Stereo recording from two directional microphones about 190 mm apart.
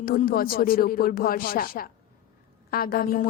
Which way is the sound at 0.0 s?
50° left (ahead or behind).